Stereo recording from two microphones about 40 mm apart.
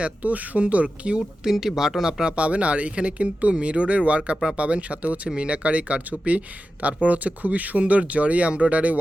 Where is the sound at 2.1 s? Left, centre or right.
Centre.